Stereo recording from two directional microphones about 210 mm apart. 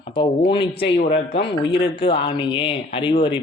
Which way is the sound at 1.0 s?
35° left (ahead or behind).